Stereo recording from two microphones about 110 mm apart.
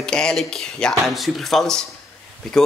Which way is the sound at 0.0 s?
5° left (ahead or behind).